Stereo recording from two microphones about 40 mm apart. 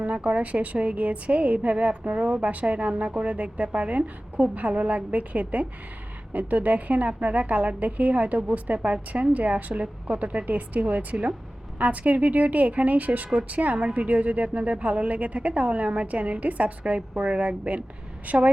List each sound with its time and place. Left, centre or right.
0.0 s a woman's voice: right